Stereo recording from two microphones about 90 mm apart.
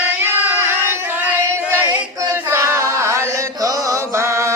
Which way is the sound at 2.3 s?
30° right (ahead or behind).